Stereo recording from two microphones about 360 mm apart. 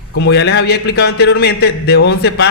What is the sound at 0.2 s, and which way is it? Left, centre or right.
A man's voice, left.